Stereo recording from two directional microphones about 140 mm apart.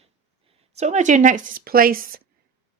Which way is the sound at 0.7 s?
55° right (ahead or behind).